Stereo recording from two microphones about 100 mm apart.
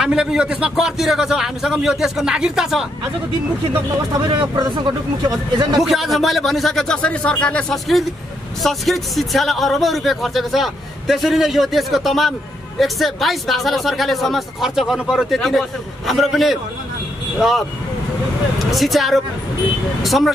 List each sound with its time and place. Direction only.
0.0 s speech: 5° right (ahead or behind)
4.1 s speech: 45° right (ahead or behind)
5.8 s speech: centre (ahead or behind)
8.6 s speech: centre (ahead or behind)
18.7 s speech: centre (ahead or behind)